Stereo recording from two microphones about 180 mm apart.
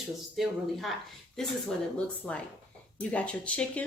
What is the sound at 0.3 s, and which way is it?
Speech, centre (ahead or behind).